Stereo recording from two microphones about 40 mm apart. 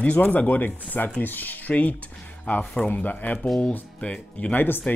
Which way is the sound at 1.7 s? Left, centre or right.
Left.